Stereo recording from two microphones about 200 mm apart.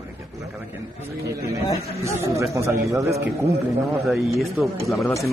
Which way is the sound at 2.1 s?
15° right (ahead or behind).